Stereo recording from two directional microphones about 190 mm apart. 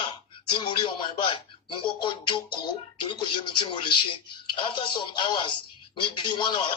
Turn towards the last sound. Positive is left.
turn(degrees=25)  # may be behind; listen again after turning